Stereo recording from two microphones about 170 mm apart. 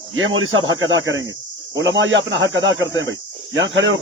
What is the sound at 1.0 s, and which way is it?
Speech, 90° right.